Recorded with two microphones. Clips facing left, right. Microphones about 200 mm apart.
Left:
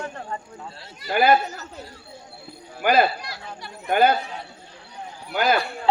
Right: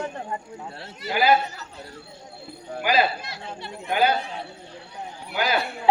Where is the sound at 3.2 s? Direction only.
25° right (ahead or behind).